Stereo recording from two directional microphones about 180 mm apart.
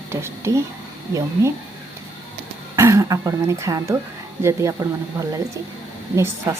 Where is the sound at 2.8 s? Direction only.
15° right (ahead or behind).